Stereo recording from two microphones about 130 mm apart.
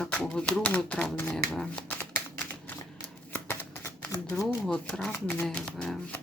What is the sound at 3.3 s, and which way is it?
Shuffling cards, 15° left (ahead or behind).